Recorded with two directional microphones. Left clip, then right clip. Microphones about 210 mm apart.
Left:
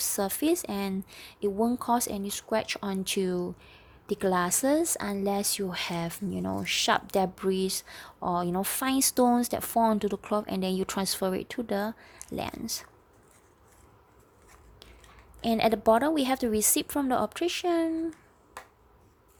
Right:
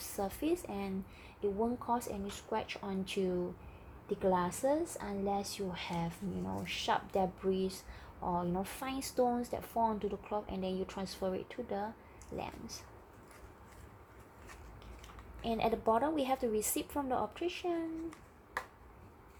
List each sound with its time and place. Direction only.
0.0 s speech: 45° left (ahead or behind)
15.4 s speech: 45° left (ahead or behind)